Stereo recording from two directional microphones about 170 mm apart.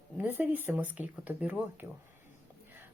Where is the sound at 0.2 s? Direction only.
10° right (ahead or behind).